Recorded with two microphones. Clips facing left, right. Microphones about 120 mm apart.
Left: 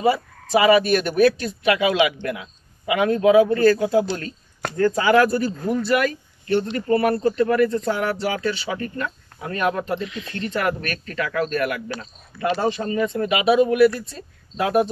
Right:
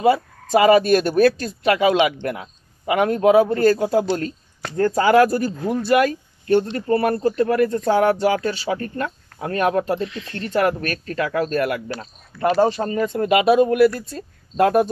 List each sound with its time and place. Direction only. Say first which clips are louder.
0.0 s speech: right 3 dB; 50° right (ahead or behind)